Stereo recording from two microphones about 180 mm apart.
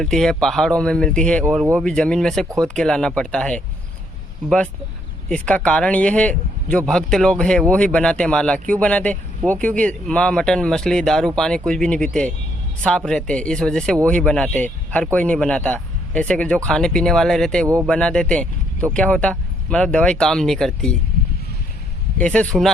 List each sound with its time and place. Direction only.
0.0 s speech: 5° left (ahead or behind)
22.2 s speech: 5° left (ahead or behind)